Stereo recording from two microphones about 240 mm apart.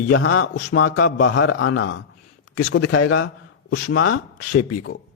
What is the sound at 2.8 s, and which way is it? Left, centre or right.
A man's voice, left.